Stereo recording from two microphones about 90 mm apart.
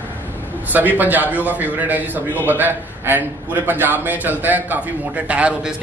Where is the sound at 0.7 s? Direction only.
20° right (ahead or behind).